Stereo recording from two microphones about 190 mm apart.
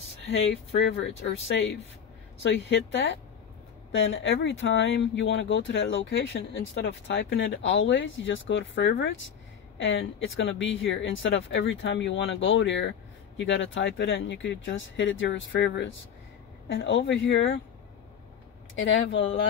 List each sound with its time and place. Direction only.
0.3 s speech: 80° left
2.4 s speech: 65° left (ahead or behind)
3.9 s speech: 80° left
18.9 s speech: 75° left (ahead or behind)